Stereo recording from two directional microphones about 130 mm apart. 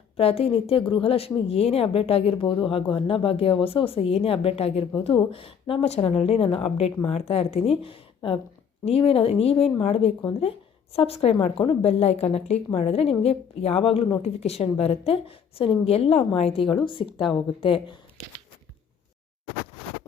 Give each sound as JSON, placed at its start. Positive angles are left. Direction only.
{"t": 0.2, "sound": "speech", "side_deg": 50}